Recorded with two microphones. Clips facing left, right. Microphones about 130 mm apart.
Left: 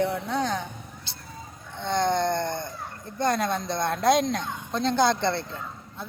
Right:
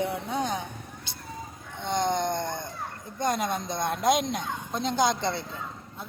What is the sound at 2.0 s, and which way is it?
Speech, 15° right (ahead or behind).